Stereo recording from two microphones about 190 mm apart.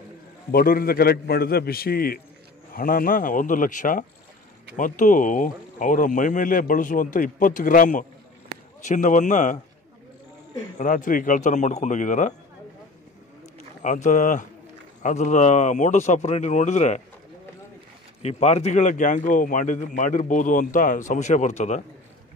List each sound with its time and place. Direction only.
0.5 s a man's voice: 50° left (ahead or behind)
10.8 s a man's voice: 45° left (ahead or behind)
13.8 s a man's voice: 40° left (ahead or behind)
18.2 s a man's voice: 35° left (ahead or behind)